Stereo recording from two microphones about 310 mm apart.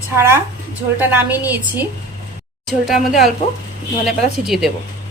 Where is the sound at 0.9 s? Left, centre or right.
Centre.